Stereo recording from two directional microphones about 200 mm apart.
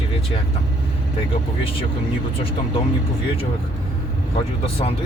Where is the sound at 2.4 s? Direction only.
25° left (ahead or behind).